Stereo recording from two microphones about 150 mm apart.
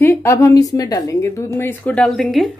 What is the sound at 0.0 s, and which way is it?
A woman's voice, 15° left (ahead or behind).